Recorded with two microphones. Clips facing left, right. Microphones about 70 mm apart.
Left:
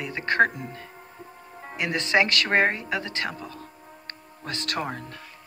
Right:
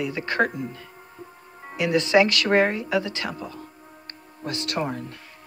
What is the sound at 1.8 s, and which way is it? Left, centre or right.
Speech, left.